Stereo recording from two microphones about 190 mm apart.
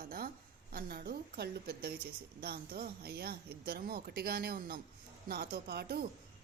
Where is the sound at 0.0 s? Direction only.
50° right (ahead or behind).